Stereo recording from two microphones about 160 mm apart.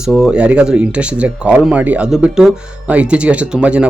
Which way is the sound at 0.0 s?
5° right (ahead or behind).